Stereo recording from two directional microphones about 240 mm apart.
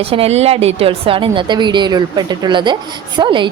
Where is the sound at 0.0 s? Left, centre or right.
Right.